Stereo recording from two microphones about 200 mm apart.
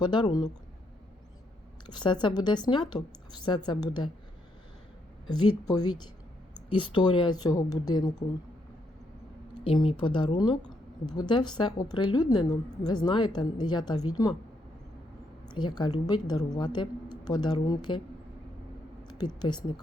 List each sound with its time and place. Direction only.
0.0 s a woman's voice: 20° left (ahead or behind)
1.9 s a woman's voice: 20° left (ahead or behind)
5.3 s a woman's voice: 20° left (ahead or behind)
9.6 s a woman's voice: 25° left (ahead or behind)
15.5 s a woman's voice: 20° left (ahead or behind)
19.0 s a sound: 20° left (ahead or behind)
19.4 s a woman's voice: 20° left (ahead or behind)